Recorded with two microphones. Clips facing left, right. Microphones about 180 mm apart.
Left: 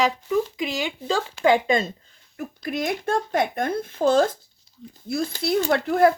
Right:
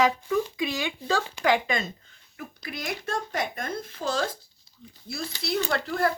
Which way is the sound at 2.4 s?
50° left (ahead or behind).